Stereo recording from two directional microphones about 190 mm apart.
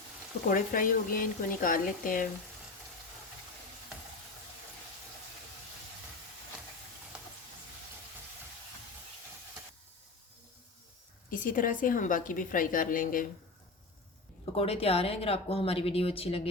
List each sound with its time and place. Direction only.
0.4 s a woman's voice: 45° left (ahead or behind)
11.3 s a woman's voice: 45° left (ahead or behind)
14.5 s speech: 30° left (ahead or behind)